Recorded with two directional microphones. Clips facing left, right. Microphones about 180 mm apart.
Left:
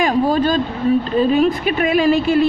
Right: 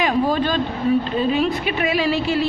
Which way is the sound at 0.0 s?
45° left (ahead or behind).